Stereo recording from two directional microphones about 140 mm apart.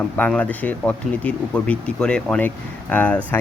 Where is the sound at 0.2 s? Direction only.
10° left (ahead or behind).